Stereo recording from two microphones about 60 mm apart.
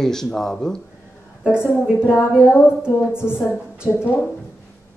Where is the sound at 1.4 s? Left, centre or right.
Left.